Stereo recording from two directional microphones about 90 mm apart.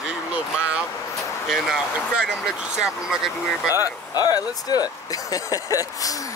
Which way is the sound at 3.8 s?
45° left (ahead or behind).